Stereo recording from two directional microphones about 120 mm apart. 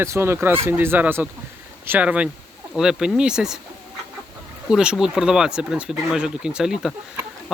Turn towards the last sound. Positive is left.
turn(degrees=-5)  # may be behind; listen again after turning